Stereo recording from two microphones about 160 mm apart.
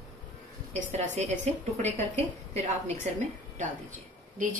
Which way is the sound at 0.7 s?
50° right (ahead or behind).